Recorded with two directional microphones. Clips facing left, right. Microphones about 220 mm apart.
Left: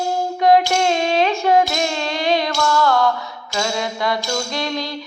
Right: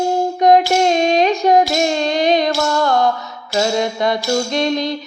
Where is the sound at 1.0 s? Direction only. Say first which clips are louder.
Right 3 dB; 40° right (ahead or behind).